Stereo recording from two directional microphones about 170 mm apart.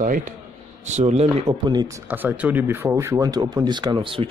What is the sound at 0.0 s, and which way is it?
A man's voice, 50° right (ahead or behind).